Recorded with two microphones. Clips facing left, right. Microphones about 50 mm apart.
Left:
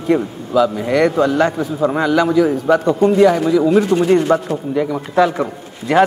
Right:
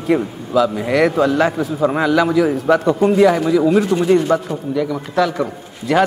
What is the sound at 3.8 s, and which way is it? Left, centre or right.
A man's voice, centre.